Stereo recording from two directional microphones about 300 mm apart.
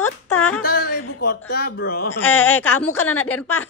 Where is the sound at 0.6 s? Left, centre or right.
Left.